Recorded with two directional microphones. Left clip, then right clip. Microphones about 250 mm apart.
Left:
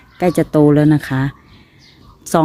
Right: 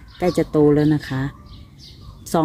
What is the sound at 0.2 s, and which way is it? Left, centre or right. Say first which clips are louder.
A woman's voice: left 4 dB; left.